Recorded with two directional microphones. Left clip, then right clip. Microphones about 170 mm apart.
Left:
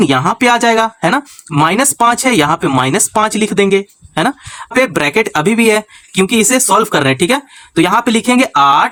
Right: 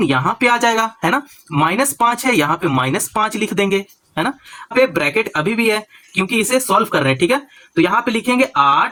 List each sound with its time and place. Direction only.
0.0 s speech: 35° left (ahead or behind)